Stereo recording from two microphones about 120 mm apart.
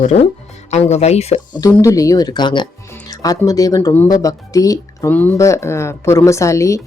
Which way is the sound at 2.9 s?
30° left (ahead or behind).